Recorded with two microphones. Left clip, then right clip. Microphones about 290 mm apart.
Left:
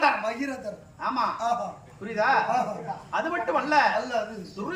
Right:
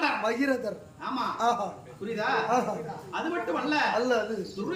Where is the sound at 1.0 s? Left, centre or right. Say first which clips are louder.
Left 2 dB; centre.